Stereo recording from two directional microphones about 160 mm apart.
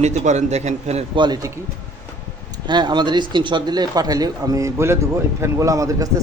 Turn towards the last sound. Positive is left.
turn(degrees=-20)  # may be behind; listen again after turning